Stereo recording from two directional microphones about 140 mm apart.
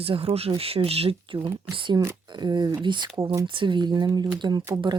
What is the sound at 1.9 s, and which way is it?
Speech, 25° right (ahead or behind).